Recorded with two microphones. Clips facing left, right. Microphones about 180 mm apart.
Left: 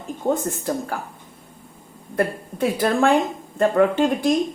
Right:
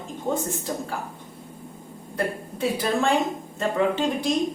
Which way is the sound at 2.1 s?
55° left (ahead or behind).